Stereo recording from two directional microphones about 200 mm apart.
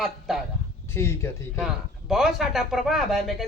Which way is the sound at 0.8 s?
15° left (ahead or behind).